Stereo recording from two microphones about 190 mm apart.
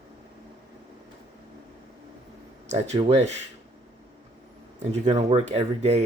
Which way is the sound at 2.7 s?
35° right (ahead or behind).